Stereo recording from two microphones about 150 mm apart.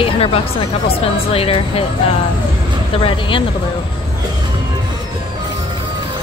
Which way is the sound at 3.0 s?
35° left (ahead or behind).